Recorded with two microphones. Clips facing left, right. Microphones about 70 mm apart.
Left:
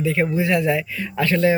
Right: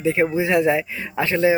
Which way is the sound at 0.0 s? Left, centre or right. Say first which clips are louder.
Right 1 dB; right.